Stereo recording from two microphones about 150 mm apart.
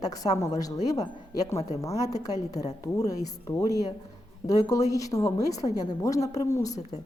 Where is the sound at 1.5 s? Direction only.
45° left (ahead or behind).